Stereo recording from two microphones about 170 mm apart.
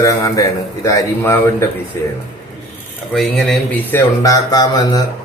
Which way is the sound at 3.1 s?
Centre (ahead or behind).